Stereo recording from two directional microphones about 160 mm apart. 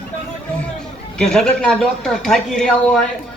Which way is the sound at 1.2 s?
5° left (ahead or behind).